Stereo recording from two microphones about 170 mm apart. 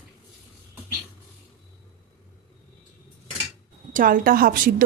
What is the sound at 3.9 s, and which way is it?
Speech, 55° right (ahead or behind).